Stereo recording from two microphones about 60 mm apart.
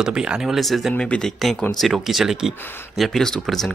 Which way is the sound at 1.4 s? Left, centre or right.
Centre.